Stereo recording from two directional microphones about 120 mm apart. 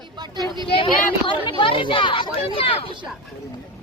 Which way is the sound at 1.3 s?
45° left (ahead or behind).